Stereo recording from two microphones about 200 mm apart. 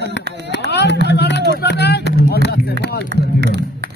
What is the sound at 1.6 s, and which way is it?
Vehicle, 55° left (ahead or behind).